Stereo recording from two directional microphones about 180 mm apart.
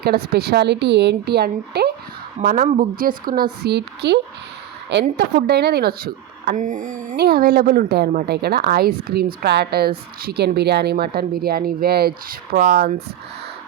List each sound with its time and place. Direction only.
0.0 s a woman's voice: 60° right (ahead or behind)
2.4 s a woman's voice: 45° right (ahead or behind)
7.2 s a woman's voice: 55° right (ahead or behind)